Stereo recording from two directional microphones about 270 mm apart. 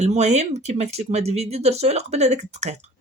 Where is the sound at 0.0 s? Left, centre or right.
Right.